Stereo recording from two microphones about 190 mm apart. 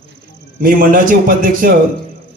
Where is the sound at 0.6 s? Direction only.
45° right (ahead or behind).